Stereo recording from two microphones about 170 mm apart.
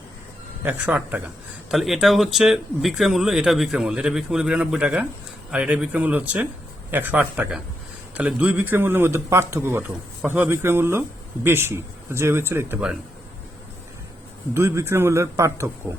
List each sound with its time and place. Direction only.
0.6 s a man's voice: 10° right (ahead or behind)
14.5 s a man's voice: 15° right (ahead or behind)